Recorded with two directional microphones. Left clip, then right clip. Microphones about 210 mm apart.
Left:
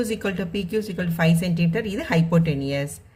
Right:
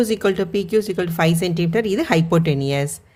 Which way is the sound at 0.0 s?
45° right (ahead or behind).